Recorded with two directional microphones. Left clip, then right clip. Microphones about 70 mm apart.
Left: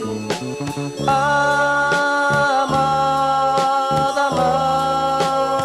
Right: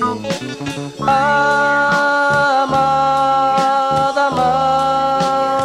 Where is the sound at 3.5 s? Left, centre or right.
Right.